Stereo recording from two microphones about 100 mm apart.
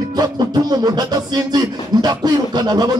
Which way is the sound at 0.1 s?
40° right (ahead or behind).